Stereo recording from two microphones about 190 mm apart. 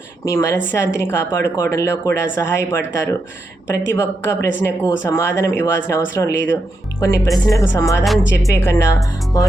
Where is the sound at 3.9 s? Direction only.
15° left (ahead or behind).